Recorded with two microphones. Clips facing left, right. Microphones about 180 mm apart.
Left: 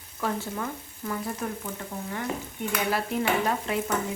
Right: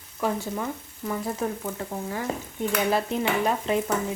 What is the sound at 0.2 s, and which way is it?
Speech, 10° right (ahead or behind).